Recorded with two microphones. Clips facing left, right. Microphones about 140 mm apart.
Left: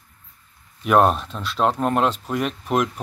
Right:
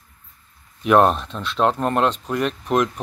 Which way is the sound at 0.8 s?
Centre (ahead or behind).